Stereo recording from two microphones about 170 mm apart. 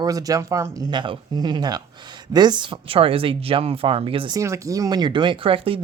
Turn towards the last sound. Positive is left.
turn(degrees=-35)  # may be behind; listen again after turning